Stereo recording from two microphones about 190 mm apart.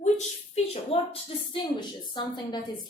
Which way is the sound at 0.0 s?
35° left (ahead or behind).